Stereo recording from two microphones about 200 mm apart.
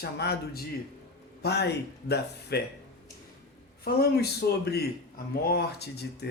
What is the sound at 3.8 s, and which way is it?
Speech, 55° left (ahead or behind).